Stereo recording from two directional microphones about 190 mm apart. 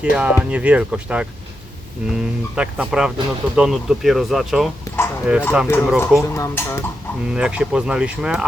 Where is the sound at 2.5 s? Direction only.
5° right (ahead or behind).